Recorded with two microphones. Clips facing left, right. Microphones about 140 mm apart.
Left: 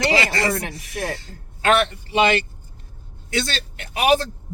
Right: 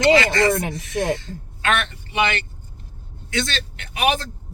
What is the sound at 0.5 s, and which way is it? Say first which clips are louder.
Speech: right 4 dB; 25° right (ahead or behind).